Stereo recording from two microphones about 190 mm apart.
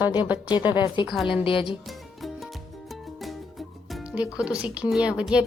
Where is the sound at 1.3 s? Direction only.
25° left (ahead or behind).